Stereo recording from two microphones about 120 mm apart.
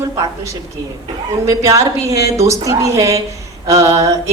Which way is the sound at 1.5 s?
25° right (ahead or behind).